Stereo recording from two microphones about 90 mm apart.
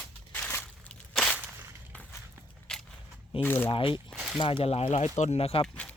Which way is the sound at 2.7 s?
5° left (ahead or behind).